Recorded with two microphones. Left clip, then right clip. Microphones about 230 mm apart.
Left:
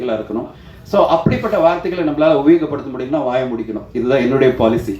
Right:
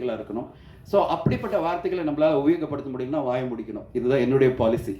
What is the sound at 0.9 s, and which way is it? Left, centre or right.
Speech, right.